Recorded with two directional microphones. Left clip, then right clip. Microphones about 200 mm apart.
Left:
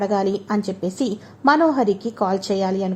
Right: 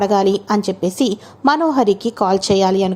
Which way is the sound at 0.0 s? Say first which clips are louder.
Right 6 dB; 20° right (ahead or behind).